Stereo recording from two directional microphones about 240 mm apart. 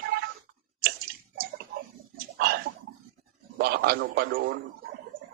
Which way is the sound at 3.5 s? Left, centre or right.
Right.